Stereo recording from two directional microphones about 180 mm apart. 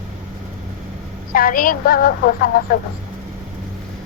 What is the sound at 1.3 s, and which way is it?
A woman's voice, 50° left (ahead or behind).